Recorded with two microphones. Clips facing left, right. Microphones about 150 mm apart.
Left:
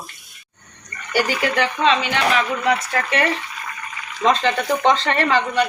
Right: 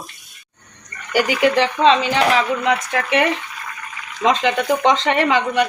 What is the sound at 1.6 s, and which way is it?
Speech, 35° right (ahead or behind).